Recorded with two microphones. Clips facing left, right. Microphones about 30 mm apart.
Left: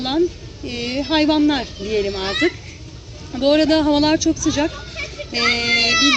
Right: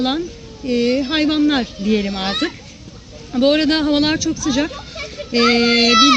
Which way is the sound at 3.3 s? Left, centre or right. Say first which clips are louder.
Even; centre.